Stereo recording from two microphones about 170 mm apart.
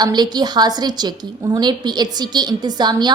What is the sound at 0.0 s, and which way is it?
A woman's voice, 25° right (ahead or behind).